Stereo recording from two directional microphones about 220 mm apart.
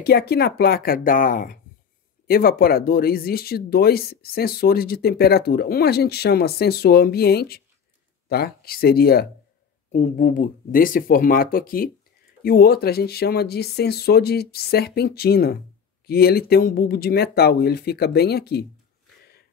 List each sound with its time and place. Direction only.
0.0 s speech: 45° left (ahead or behind)